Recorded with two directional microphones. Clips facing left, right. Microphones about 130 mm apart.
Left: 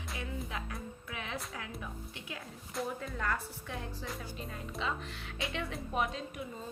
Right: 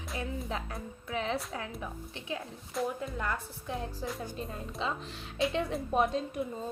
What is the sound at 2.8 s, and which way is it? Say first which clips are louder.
Speech: right 4 dB; centre (ahead or behind).